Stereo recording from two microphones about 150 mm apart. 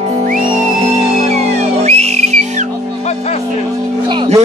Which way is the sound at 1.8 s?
45° right (ahead or behind).